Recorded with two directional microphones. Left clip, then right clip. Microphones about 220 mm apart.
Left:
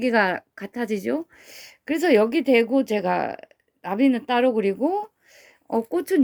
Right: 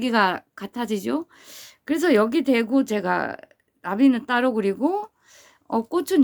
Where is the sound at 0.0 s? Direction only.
5° left (ahead or behind).